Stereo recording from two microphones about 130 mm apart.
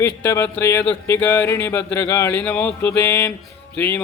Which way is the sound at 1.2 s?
15° left (ahead or behind).